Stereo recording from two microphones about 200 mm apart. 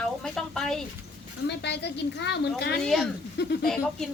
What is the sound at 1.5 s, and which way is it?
A woman's voice, 55° left (ahead or behind).